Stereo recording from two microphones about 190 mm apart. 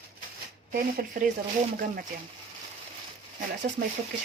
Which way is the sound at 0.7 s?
45° right (ahead or behind).